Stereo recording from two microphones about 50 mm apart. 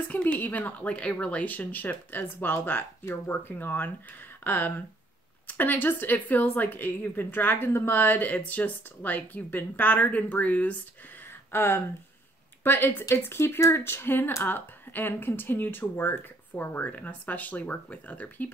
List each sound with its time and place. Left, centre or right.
0.1 s speech: left
11.5 s speech: left